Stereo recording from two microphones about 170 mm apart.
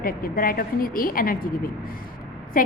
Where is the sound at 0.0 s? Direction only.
55° left (ahead or behind).